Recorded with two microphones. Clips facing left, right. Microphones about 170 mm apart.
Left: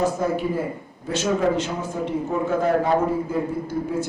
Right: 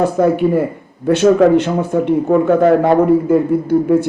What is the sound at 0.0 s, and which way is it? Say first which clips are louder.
Speech: right 9 dB; 65° right (ahead or behind).